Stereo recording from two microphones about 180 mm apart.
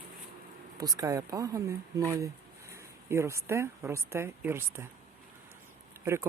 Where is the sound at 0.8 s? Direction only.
20° right (ahead or behind).